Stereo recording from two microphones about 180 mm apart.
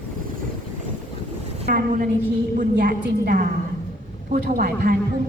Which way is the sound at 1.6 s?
50° right (ahead or behind).